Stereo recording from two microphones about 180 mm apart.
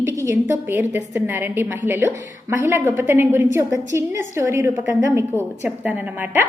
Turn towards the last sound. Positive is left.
turn(degrees=-10)  # may be behind; listen again after turning